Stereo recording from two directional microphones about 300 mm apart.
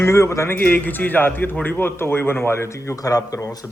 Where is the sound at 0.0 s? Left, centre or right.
Centre.